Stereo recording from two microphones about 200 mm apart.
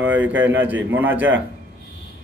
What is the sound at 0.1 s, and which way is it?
Speech, 70° right (ahead or behind).